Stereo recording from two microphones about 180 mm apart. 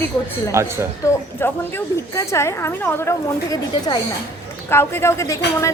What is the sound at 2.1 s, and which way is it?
A woman's voice, 15° left (ahead or behind).